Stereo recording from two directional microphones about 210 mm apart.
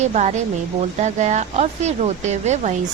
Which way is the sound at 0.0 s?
35° right (ahead or behind).